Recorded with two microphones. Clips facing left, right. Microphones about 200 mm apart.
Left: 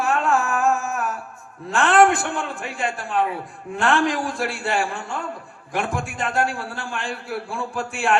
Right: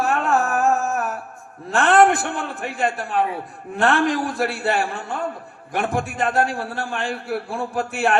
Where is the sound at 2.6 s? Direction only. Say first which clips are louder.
Right 3 dB; 60° right (ahead or behind).